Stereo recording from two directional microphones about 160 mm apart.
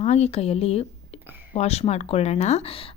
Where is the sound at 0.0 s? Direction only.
40° left (ahead or behind).